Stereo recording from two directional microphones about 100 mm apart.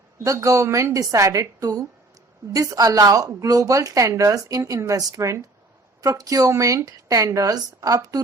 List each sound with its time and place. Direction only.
0.3 s speech: 35° right (ahead or behind)